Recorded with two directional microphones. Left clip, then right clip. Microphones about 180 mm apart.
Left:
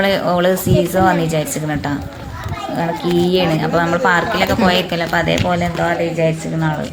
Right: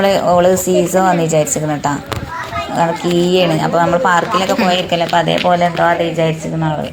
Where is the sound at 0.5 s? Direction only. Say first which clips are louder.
Right 3 dB; 5° left (ahead or behind).